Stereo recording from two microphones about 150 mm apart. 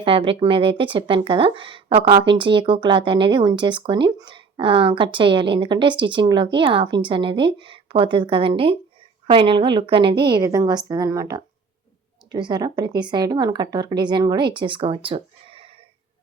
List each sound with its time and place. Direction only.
0.0 s speech: 35° right (ahead or behind)